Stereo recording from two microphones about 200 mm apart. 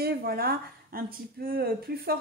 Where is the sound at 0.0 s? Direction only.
50° right (ahead or behind).